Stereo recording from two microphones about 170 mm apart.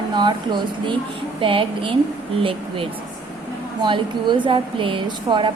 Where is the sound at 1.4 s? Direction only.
30° right (ahead or behind).